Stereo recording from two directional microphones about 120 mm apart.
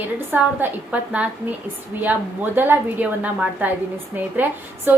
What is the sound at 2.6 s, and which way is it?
A woman's voice, 15° right (ahead or behind).